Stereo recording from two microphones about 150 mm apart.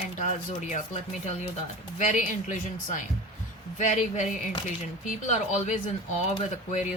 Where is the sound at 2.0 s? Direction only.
55° left (ahead or behind).